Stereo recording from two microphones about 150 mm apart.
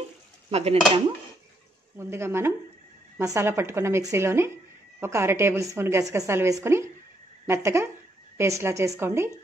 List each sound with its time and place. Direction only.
0.5 s dishes: 45° right (ahead or behind)
2.0 s a woman's voice: 15° right (ahead or behind)